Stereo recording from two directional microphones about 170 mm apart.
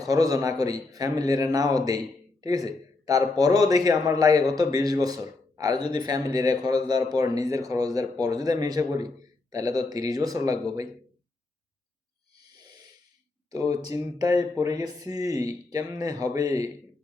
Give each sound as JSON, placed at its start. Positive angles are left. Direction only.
{"t": 0.0, "sound": "speech", "side_deg": -20}
{"t": 13.5, "sound": "speech", "side_deg": -20}